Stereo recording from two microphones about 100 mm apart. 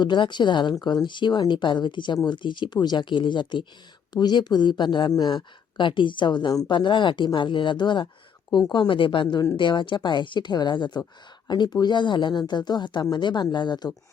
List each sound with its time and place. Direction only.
0.0 s speech: 50° left (ahead or behind)
8.4 s speech: 40° left (ahead or behind)
8.7 s speech: 55° left (ahead or behind)